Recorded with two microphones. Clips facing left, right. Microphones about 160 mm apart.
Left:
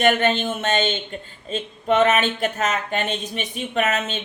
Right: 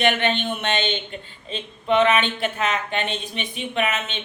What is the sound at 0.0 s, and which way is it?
Speech, 45° left (ahead or behind).